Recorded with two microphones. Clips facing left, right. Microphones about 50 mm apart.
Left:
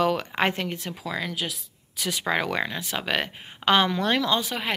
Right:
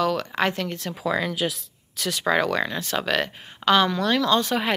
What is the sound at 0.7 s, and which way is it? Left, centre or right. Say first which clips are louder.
Speech: right 1 dB; centre.